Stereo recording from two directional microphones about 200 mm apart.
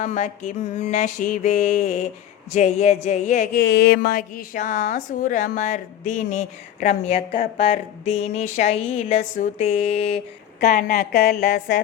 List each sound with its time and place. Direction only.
0.0 s a woman's voice: 35° left (ahead or behind)
3.6 s a woman's voice: 55° left (ahead or behind); by 10.2 s 30° left (ahead or behind)
10.6 s a woman's voice: 45° left (ahead or behind)